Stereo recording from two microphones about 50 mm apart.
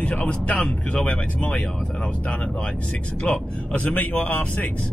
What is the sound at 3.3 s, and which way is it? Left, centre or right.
Speech, left.